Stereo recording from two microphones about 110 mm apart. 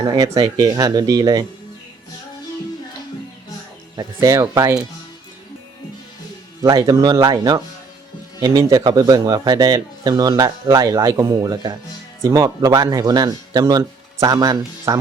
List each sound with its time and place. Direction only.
0.0 s speech: 35° right (ahead or behind)
3.9 s speech: 30° right (ahead or behind)
6.6 s speech: 30° right (ahead or behind)